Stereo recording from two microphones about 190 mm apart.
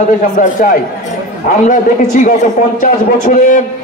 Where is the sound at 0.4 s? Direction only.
40° left (ahead or behind).